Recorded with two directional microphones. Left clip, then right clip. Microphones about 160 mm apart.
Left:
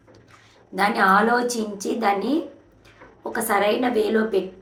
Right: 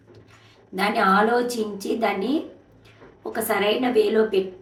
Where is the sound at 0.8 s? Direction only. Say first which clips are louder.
Left 2 dB; 10° right (ahead or behind).